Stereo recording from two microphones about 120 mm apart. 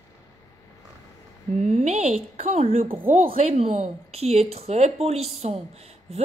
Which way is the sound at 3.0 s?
65° right (ahead or behind).